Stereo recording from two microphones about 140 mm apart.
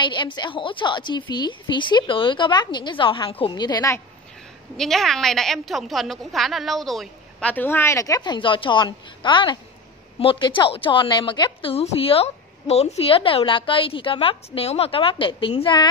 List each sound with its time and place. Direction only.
0.0 s a woman's voice: 35° left (ahead or behind)
4.7 s a woman's voice: centre (ahead or behind); by 15.9 s 35° left (ahead or behind)